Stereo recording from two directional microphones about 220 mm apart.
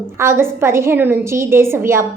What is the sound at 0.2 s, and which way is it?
A woman's voice, 10° right (ahead or behind).